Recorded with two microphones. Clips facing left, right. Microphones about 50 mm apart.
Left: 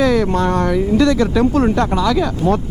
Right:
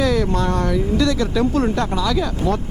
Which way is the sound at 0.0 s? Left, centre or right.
Centre.